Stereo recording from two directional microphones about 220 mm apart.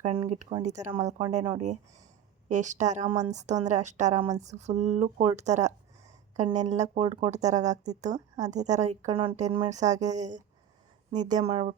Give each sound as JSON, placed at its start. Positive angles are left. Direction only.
{"t": 0.0, "sound": "a woman's voice", "side_deg": -30}
{"t": 0.9, "sound": "a woman's voice", "side_deg": -15}
{"t": 1.3, "sound": "a woman's voice", "side_deg": -30}